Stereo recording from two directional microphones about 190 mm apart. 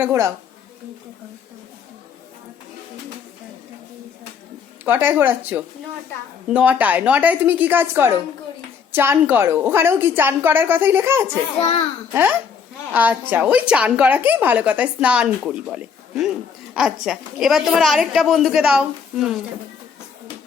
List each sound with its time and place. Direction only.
0.0 s a woman's voice: 15° right (ahead or behind)
4.9 s a woman's voice: 10° right (ahead or behind)